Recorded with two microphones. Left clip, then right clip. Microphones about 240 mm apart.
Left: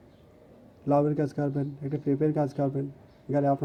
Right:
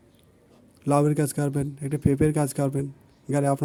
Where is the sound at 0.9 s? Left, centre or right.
Right.